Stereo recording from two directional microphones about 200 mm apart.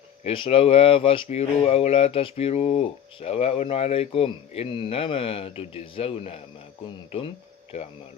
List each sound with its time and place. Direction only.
0.3 s speech: 30° left (ahead or behind)
7.7 s speech: 30° left (ahead or behind)